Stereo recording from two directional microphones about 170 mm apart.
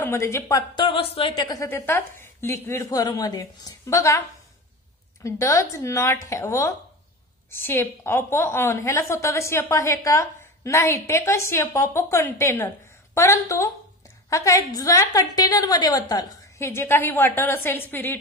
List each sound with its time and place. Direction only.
0.0 s speech: 15° left (ahead or behind)
5.2 s a woman's voice: 20° left (ahead or behind)